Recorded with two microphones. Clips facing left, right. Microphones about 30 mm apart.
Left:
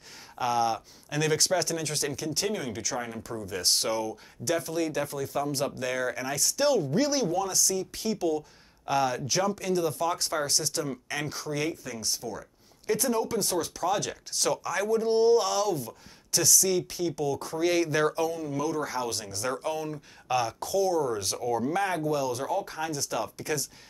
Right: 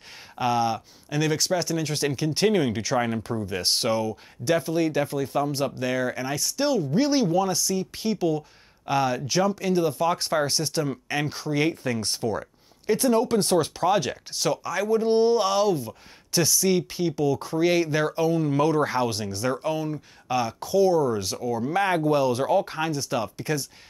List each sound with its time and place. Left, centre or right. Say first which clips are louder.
0.4 s speech: right 3 dB; centre
2.0 s speech: right 10 dB; right; by 7.0 s centre
7.0 s speech: right 5 dB; right
11.7 s speech: right 6 dB; right
13.2 s speech: right 7 dB; right; by 18.3 s centre
18.3 s speech: right 8 dB; right
19.0 s speech: right 5 dB; centre
21.7 s speech: right 6 dB; right